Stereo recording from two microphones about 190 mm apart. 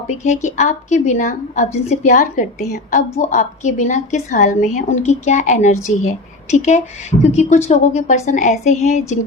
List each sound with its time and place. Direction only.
0.2 s a woman's voice: 40° left (ahead or behind)